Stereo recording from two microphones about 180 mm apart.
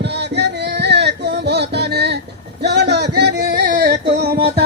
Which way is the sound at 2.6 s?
70° right (ahead or behind).